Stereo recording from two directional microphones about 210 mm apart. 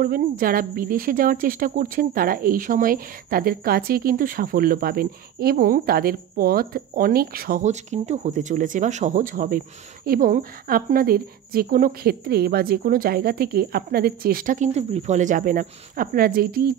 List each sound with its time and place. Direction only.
0.0 s speech: 45° right (ahead or behind)